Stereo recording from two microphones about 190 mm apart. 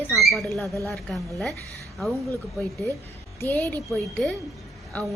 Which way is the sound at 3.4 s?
10° left (ahead or behind).